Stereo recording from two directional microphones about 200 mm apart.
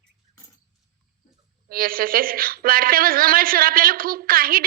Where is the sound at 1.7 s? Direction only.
45° right (ahead or behind).